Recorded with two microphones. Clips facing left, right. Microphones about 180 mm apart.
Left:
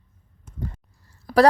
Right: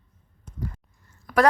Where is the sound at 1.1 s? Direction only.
35° left (ahead or behind).